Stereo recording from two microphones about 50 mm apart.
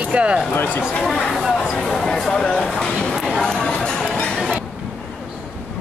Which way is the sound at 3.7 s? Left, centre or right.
Centre.